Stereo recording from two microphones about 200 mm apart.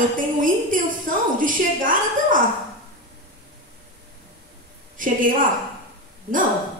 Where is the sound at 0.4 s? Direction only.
40° right (ahead or behind).